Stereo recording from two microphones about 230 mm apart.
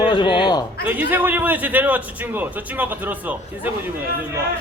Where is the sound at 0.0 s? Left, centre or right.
Left.